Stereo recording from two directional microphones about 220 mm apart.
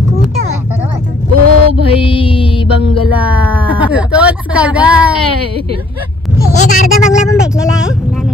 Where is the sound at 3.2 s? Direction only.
5° right (ahead or behind).